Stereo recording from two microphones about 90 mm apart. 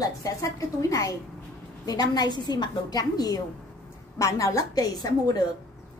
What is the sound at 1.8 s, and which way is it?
A woman's voice, 50° left (ahead or behind).